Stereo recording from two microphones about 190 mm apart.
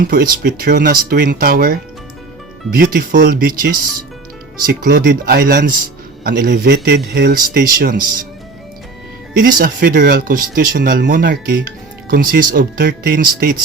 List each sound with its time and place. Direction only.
0.0 s speech: 50° right (ahead or behind)
9.4 s speech: 50° right (ahead or behind)